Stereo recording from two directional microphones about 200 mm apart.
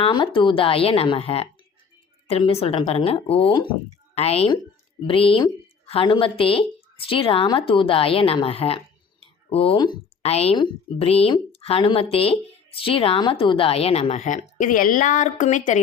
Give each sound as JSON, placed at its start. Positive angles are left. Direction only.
{"t": 0.0, "sound": "speech", "side_deg": 25}